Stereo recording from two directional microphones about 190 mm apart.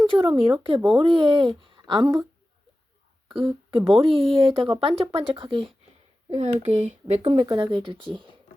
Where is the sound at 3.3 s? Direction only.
25° right (ahead or behind).